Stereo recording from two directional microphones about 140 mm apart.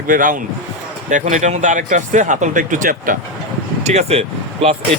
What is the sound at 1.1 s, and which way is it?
Speech, 60° right (ahead or behind).